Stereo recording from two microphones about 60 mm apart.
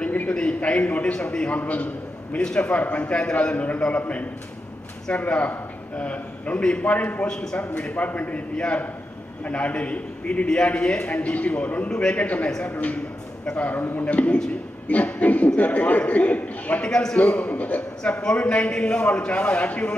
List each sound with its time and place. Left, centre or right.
0.3 s a man's voice: centre
2.4 s a man's voice: centre
2.7 s a man's voice: left
16.8 s a man's voice: centre
17.2 s a man's voice: left